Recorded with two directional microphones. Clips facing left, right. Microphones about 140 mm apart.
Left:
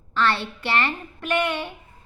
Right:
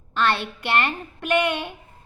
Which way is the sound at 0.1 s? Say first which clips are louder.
Even; 15° right (ahead or behind).